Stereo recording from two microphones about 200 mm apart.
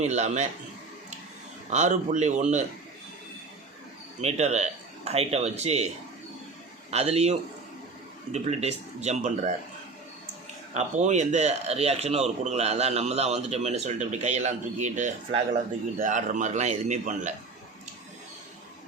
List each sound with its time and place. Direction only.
0.0 s speech: 35° right (ahead or behind)
1.7 s speech: 35° right (ahead or behind)
4.2 s speech: 35° right (ahead or behind)
6.9 s speech: 30° right (ahead or behind)
10.8 s speech: 35° right (ahead or behind)